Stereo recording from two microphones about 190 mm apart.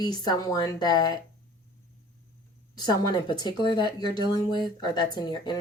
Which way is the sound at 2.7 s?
20° left (ahead or behind).